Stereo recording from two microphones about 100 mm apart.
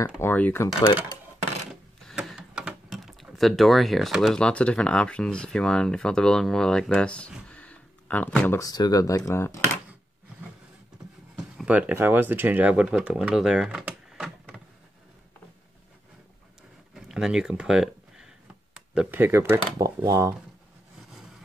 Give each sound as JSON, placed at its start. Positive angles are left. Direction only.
{"t": 0.0, "sound": "speech", "side_deg": 20}
{"t": 2.2, "sound": "mechanisms", "side_deg": -5}
{"t": 3.3, "sound": "speech", "side_deg": 0}
{"t": 4.4, "sound": "speech", "side_deg": 10}
{"t": 8.5, "sound": "speech", "side_deg": 35}
{"t": 11.3, "sound": "a sound", "side_deg": -5}
{"t": 11.7, "sound": "speech", "side_deg": -20}
{"t": 16.9, "sound": "a sound", "side_deg": -5}
{"t": 18.9, "sound": "speech", "side_deg": -20}